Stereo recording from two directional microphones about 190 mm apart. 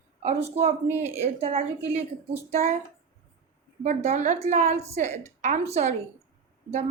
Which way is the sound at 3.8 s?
40° right (ahead or behind).